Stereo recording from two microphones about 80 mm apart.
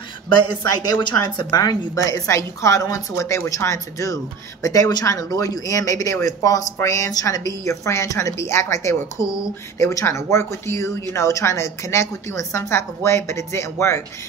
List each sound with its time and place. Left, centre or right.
0.9 s a woman's voice: left
1.5 s a woman's voice: left